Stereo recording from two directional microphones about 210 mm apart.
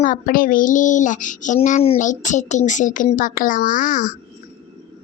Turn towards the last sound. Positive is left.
turn(degrees=40)  # may be behind; listen again after turning